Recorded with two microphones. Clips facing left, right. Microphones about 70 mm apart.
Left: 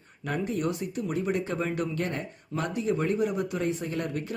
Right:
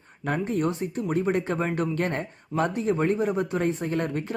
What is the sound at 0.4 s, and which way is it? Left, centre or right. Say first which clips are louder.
Speech: right 3 dB; right.